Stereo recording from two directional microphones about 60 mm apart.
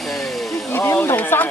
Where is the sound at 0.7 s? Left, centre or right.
Left.